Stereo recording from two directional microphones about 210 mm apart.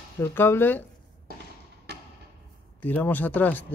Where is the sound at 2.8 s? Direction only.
10° left (ahead or behind).